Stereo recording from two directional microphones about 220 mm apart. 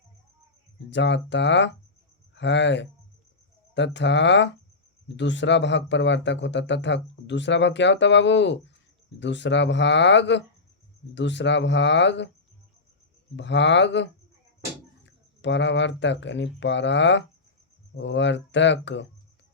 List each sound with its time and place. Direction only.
0.9 s speech: 55° left (ahead or behind)
13.3 s speech: 55° left (ahead or behind)